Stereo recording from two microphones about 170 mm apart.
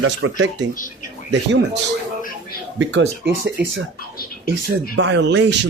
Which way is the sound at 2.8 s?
90° right.